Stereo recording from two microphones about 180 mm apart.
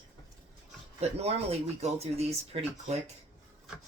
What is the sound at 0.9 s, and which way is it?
Speech, 35° right (ahead or behind).